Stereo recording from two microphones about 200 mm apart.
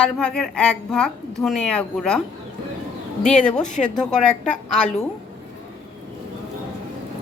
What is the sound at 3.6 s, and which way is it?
Speech, 40° left (ahead or behind).